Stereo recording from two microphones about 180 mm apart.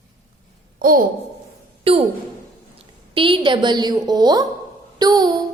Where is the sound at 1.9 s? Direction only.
30° right (ahead or behind).